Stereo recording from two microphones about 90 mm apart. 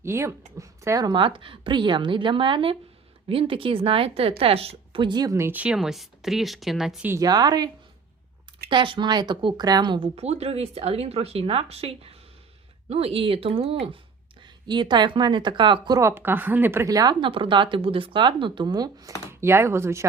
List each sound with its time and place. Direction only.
0.0 s speech: 30° right (ahead or behind)
1.1 s a woman's voice: 70° right (ahead or behind)
5.5 s speech: 15° right (ahead or behind)
5.7 s speech: 5° right (ahead or behind)
7.2 s a woman's voice: 45° right (ahead or behind)
8.7 s speech: 65° right (ahead or behind)
9.6 s speech: 50° right (ahead or behind); by 14.0 s 90° right
14.4 s speech: 55° right (ahead or behind)
16.0 s a woman's voice: 30° right (ahead or behind)
16.8 s a woman's voice: 45° right (ahead or behind)
17.2 s speech: 75° right (ahead or behind); by 19.1 s 50° right (ahead or behind)
19.3 s speech: 30° right (ahead or behind)